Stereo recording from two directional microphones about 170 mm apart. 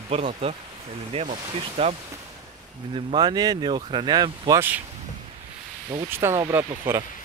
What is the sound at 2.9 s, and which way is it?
Speech, 30° right (ahead or behind).